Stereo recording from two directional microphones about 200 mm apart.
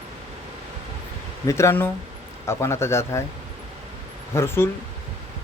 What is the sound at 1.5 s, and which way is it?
Speech, 15° left (ahead or behind).